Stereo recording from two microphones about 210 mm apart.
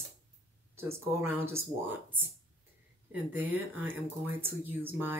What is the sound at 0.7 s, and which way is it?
Speech, 10° right (ahead or behind).